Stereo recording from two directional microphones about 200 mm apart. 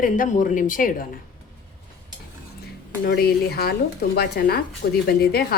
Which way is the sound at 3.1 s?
50° left (ahead or behind).